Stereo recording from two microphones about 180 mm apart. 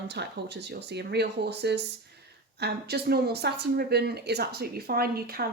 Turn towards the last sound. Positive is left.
turn(degrees=-55)  # may be behind; listen again after turning